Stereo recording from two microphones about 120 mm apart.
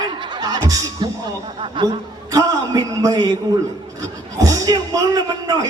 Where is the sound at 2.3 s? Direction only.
30° right (ahead or behind).